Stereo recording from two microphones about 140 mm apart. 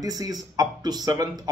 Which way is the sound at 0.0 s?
25° right (ahead or behind).